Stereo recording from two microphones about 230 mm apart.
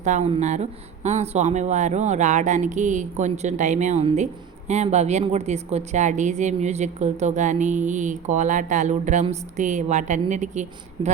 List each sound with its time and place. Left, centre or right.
0.0 s a woman's voice: right